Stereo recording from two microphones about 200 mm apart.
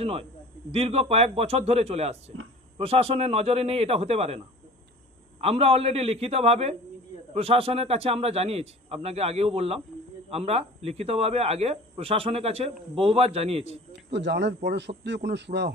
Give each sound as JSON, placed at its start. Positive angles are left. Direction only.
{"t": 0.0, "sound": "a man's voice", "side_deg": -30}
{"t": 5.4, "sound": "a man's voice", "side_deg": -30}
{"t": 14.1, "sound": "speech", "side_deg": -60}